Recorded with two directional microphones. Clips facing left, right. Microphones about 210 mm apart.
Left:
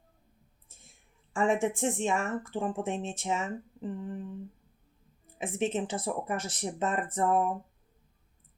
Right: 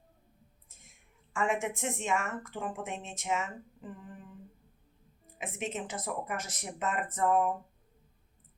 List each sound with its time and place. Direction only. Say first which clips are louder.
0.7 s speech: left 1 dB; 30° left (ahead or behind)
5.4 s speech: left 7 dB; 30° left (ahead or behind)